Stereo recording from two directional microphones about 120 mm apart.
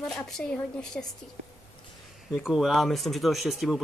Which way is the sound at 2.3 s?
5° right (ahead or behind).